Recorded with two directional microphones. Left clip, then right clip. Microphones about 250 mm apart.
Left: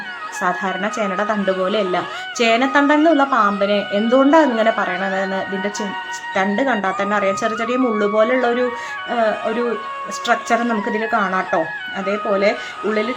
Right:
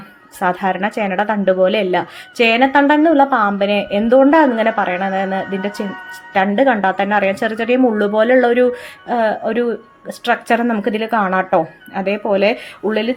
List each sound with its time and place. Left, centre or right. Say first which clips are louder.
0.3 s speech: right 3 dB; centre